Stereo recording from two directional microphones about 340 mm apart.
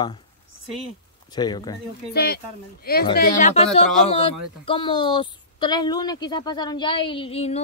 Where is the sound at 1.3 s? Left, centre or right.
Centre.